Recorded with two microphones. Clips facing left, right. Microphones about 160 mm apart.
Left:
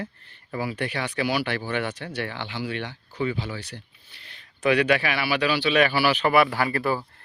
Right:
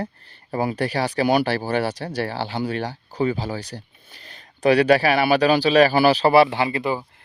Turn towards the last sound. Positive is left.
turn(degrees=-15)  # may be behind; listen again after turning